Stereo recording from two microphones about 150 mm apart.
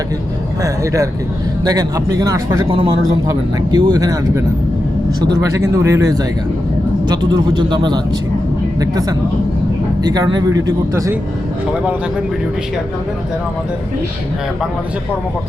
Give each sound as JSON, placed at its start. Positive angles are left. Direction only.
{"t": 1.6, "sound": "speech", "side_deg": -25}